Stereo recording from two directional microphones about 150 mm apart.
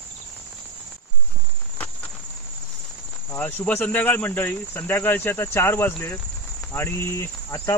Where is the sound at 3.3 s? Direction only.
10° left (ahead or behind).